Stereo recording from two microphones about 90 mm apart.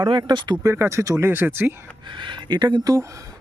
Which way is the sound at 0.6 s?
35° right (ahead or behind).